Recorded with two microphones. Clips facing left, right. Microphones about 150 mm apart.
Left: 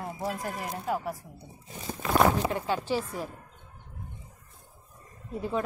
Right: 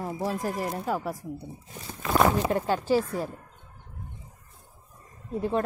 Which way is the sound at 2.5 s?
45° right (ahead or behind).